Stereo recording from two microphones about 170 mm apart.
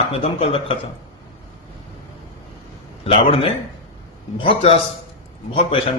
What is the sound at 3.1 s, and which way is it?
A man's voice, 35° left (ahead or behind).